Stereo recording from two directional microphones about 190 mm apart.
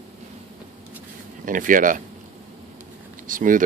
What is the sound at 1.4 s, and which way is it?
Speech, 45° right (ahead or behind).